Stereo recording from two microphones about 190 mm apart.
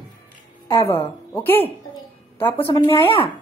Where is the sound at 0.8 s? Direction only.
30° left (ahead or behind).